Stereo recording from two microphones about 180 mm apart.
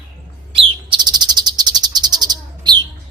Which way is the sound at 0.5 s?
25° right (ahead or behind).